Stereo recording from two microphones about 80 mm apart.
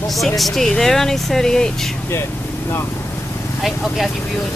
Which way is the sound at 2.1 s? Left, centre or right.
Left.